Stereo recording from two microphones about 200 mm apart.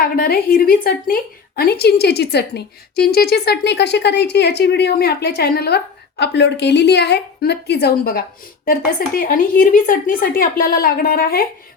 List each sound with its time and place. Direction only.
0.0 s a woman's voice: 50° left (ahead or behind)